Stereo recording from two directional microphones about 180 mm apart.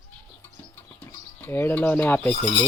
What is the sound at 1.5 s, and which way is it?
Speech, 10° left (ahead or behind).